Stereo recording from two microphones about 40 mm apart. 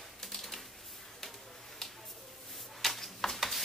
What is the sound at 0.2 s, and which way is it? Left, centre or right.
Typewriter, centre.